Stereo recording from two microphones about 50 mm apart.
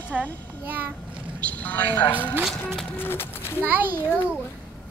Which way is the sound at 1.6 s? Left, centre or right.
Left.